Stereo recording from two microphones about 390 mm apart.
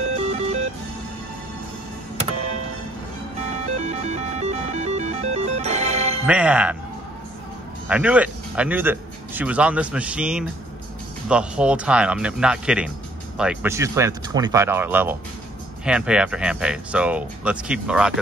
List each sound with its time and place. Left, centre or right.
0.3 s music: centre
3.6 s music: centre
6.2 s speech: centre
7.9 s speech: centre